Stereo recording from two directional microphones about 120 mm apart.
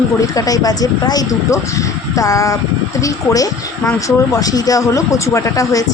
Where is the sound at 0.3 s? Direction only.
30° left (ahead or behind).